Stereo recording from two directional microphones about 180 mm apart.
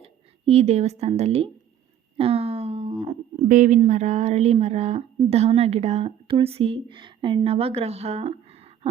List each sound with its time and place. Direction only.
0.0 s speech: 35° right (ahead or behind)